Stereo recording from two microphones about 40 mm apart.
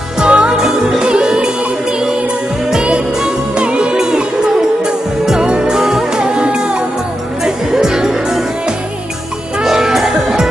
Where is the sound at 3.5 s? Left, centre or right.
Right.